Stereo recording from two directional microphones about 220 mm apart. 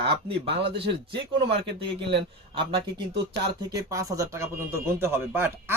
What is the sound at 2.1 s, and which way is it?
A man's voice, 20° right (ahead or behind).